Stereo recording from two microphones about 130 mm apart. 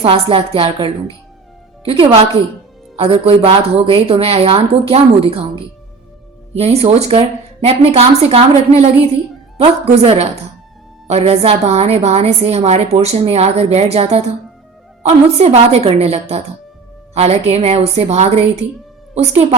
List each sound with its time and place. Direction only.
0.0 s a woman's voice: 45° right (ahead or behind)
6.5 s a woman's voice: 50° right (ahead or behind)
9.6 s a woman's voice: 45° right (ahead or behind)